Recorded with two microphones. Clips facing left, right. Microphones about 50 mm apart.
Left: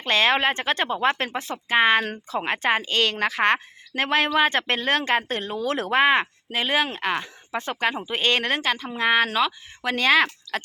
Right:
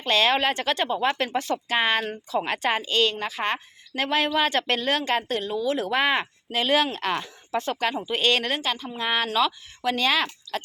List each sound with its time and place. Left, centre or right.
0.0 s a woman's voice: left
1.3 s a woman's voice: left
6.0 s a woman's voice: left